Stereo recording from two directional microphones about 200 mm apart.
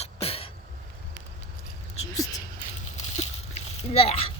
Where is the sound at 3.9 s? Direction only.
30° left (ahead or behind).